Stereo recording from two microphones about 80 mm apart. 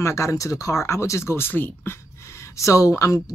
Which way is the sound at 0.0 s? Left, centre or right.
Left.